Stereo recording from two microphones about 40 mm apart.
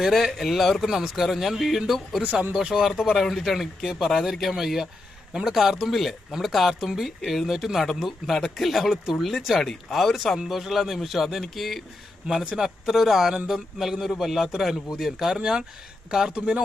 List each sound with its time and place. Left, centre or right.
0.0 s speech: centre
2.2 s speech: right
2.6 s a man's voice: centre
3.2 s a man's voice: centre
12.3 s a man's voice: centre
16.3 s speech: right